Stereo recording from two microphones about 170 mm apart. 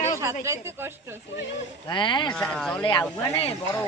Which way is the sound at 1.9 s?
25° left (ahead or behind).